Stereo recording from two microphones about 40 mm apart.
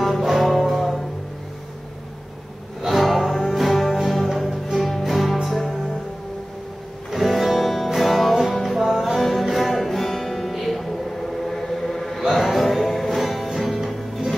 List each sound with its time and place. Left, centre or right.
0.0 s music: centre
2.8 s music: centre
7.1 s music: centre